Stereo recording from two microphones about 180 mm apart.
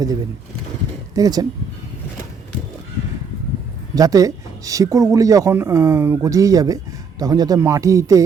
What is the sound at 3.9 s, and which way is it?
Speech, 20° right (ahead or behind).